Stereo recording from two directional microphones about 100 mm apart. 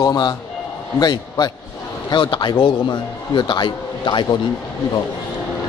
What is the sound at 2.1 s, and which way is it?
A man's voice, 55° left (ahead or behind).